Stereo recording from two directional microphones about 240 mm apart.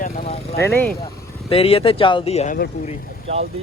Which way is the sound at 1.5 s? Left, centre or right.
Left.